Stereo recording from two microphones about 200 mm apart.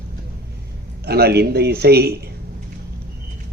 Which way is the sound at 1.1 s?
55° right (ahead or behind).